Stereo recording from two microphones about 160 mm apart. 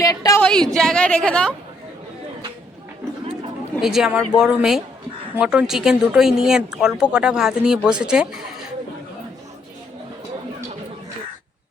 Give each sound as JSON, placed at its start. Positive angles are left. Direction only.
{"t": 0.0, "sound": "speech", "side_deg": 20}
{"t": 0.4, "sound": "a woman's voice", "side_deg": 5}
{"t": 3.8, "sound": "a woman's voice", "side_deg": -5}